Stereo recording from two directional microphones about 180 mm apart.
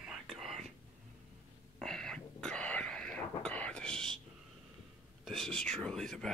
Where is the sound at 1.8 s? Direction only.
Centre (ahead or behind).